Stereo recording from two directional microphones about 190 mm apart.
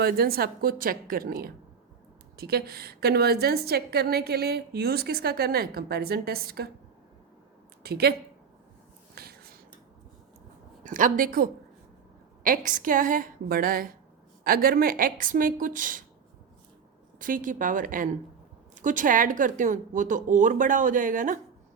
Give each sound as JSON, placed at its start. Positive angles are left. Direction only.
{"t": 0.0, "sound": "a woman's voice", "side_deg": -55}
{"t": 7.9, "sound": "a woman's voice", "side_deg": -55}
{"t": 9.1, "sound": "a sound", "side_deg": -55}
{"t": 10.8, "sound": "speech", "side_deg": -45}
{"t": 17.2, "sound": "speech", "side_deg": -45}